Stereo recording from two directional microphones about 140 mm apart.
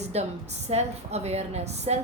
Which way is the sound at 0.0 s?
50° right (ahead or behind).